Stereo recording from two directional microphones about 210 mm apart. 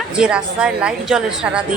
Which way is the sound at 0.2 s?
5° right (ahead or behind).